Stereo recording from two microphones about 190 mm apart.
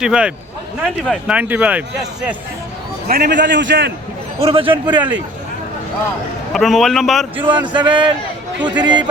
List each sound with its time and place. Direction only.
0.0 s a man's voice: 5° right (ahead or behind)
3.1 s a man's voice: 60° right (ahead or behind)
4.4 s a man's voice: 30° right (ahead or behind)
6.5 s a man's voice: centre (ahead or behind)
7.4 s a man's voice: 25° right (ahead or behind)